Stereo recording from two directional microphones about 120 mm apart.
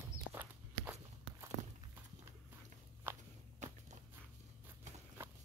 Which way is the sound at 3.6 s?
90° right.